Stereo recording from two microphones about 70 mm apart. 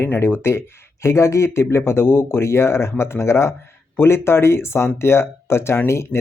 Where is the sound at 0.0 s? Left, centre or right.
Left.